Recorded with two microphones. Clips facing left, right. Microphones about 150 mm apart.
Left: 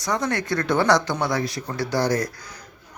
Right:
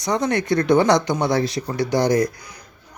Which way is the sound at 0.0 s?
20° right (ahead or behind).